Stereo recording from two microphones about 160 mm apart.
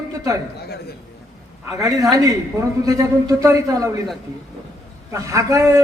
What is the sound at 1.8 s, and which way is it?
A man's voice, 20° right (ahead or behind).